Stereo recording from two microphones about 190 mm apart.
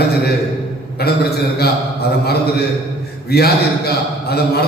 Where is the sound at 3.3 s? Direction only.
55° left (ahead or behind).